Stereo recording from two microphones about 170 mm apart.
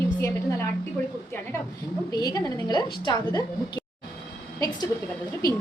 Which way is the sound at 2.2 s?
25° left (ahead or behind).